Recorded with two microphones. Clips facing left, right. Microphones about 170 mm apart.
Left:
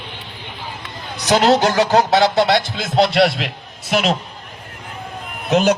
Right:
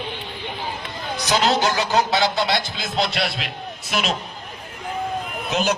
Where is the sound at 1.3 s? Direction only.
50° left (ahead or behind).